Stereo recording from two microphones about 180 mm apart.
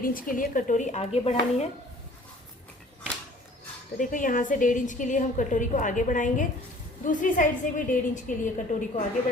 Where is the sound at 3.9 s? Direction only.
50° left (ahead or behind).